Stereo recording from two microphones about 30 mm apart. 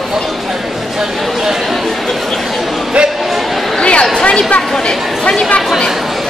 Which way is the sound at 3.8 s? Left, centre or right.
Left.